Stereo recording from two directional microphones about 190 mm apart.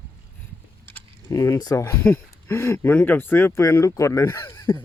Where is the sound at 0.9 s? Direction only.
15° left (ahead or behind).